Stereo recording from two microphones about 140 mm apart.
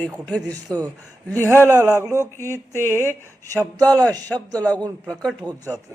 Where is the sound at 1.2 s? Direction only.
10° left (ahead or behind).